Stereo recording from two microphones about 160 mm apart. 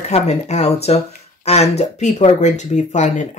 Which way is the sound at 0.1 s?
40° left (ahead or behind).